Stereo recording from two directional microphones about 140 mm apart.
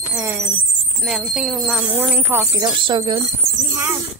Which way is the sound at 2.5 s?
30° right (ahead or behind).